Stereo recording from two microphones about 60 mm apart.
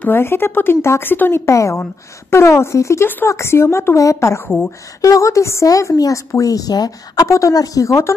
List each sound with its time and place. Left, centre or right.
0.0 s speech: left
1.4 s a woman's voice: left
5.7 s a woman's voice: left